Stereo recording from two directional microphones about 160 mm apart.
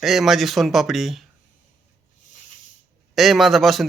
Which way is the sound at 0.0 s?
Centre (ahead or behind).